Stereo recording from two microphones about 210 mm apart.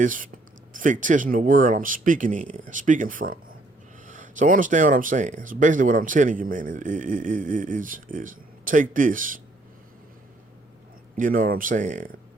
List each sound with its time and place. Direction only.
0.0 s speech: 40° right (ahead or behind)
11.2 s speech: 40° right (ahead or behind)